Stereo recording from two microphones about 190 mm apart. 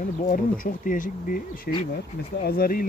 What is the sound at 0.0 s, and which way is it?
Speech, 45° left (ahead or behind).